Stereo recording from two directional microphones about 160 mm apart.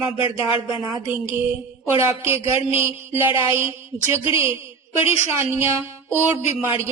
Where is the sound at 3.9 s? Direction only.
40° right (ahead or behind).